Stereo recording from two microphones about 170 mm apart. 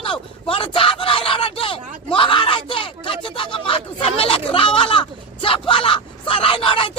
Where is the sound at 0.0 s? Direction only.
30° left (ahead or behind).